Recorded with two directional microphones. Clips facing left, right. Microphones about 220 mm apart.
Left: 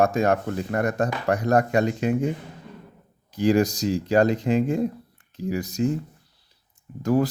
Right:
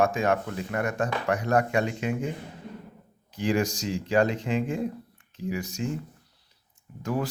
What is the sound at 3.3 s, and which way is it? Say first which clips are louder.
Speech: left 6 dB; 40° left (ahead or behind).